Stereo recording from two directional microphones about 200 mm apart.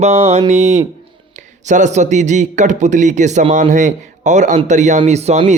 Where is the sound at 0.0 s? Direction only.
30° right (ahead or behind).